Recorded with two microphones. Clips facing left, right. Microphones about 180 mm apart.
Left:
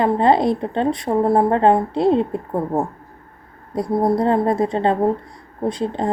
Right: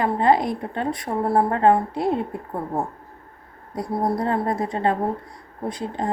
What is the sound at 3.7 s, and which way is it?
A woman's voice, 25° left (ahead or behind).